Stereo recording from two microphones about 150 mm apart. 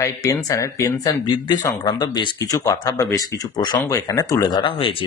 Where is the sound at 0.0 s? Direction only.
20° left (ahead or behind).